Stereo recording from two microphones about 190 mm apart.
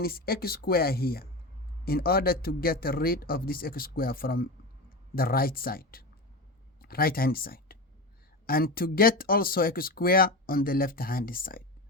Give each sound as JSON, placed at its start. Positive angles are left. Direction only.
{"t": 0.0, "sound": "speech", "side_deg": 55}